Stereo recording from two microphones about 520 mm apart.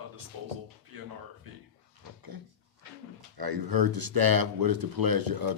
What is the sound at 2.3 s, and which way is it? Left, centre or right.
Speech, right.